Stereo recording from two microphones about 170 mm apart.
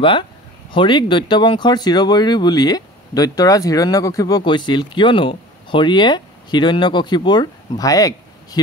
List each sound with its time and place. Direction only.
0.7 s speech: 30° left (ahead or behind)